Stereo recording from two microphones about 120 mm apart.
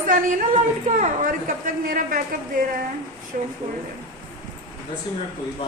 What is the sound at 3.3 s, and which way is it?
Speech, 90° right.